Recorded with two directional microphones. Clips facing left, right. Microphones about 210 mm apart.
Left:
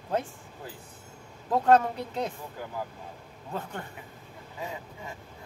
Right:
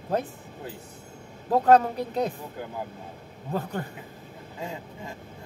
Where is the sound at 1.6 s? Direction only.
40° right (ahead or behind).